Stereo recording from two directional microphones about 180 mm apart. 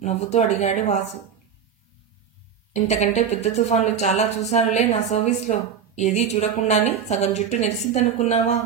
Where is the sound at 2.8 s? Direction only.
40° left (ahead or behind).